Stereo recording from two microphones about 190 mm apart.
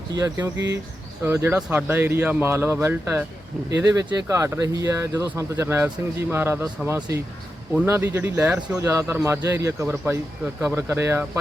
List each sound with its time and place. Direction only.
0.2 s speech: 15° right (ahead or behind)